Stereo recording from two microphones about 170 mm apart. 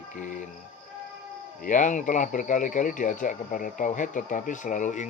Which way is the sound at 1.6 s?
50° left (ahead or behind).